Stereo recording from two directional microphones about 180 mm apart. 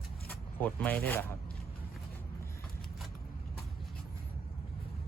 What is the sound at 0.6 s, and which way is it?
Speech, 10° left (ahead or behind).